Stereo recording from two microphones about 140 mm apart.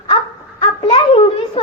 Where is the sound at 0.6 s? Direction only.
40° left (ahead or behind).